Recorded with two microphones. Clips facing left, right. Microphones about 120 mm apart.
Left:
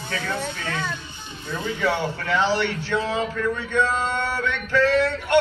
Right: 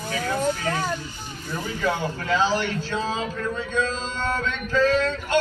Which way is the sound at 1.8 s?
70° left (ahead or behind).